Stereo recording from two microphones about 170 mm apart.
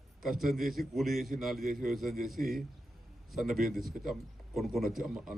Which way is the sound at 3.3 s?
Centre (ahead or behind).